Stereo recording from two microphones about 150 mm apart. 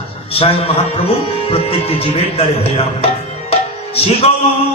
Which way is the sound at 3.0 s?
40° left (ahead or behind).